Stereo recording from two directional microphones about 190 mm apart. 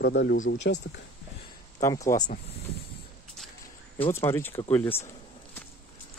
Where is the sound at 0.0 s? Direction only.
60° left (ahead or behind).